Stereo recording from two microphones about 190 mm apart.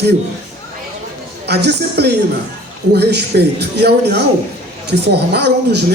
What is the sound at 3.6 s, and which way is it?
A man's voice, 60° right (ahead or behind).